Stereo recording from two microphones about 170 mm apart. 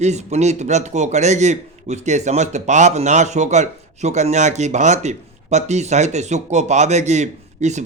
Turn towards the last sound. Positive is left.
turn(degrees=-45)  # may be behind; listen again after turning